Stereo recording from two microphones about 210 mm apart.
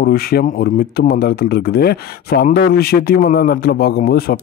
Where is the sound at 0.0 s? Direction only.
45° left (ahead or behind).